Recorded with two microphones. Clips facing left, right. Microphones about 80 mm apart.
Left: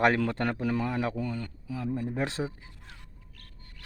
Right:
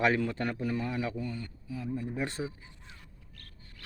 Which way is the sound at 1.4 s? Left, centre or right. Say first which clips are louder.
Left 4 dB; left.